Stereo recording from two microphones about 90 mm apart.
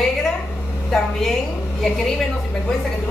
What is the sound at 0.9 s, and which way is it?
Speech, 5° left (ahead or behind).